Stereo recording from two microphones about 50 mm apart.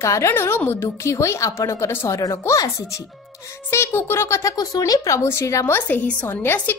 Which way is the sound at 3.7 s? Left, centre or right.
Left.